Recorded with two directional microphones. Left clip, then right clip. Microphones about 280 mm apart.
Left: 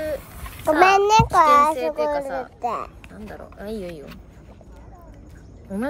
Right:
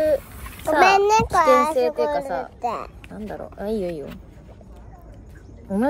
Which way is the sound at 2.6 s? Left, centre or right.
Centre.